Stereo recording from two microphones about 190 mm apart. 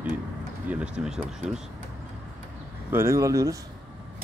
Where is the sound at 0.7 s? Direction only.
5° right (ahead or behind).